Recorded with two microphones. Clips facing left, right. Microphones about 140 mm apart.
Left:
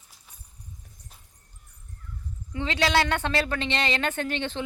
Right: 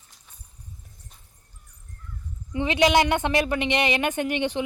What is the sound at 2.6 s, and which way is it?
Speech, 15° right (ahead or behind).